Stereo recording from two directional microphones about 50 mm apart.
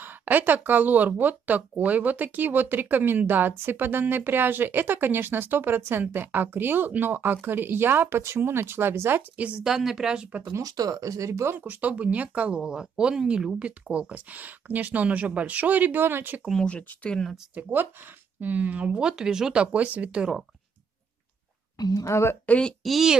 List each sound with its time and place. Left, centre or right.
0.0 s a woman's voice: right
9.6 s speech: centre
11.1 s speech: right
11.5 s speech: right
16.6 s speech: left
17.6 s speech: right
22.0 s a woman's voice: left
22.8 s speech: centre